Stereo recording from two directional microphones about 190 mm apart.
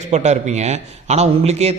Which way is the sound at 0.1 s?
35° right (ahead or behind).